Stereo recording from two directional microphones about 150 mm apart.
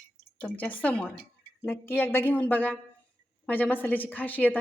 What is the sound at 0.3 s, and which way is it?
A woman's voice, 10° left (ahead or behind).